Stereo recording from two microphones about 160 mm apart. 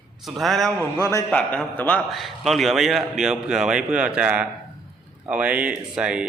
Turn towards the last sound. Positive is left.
turn(degrees=-5)  # may be behind; listen again after turning